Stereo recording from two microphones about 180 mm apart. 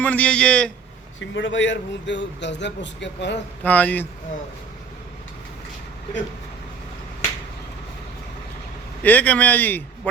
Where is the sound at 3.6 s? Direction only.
10° left (ahead or behind).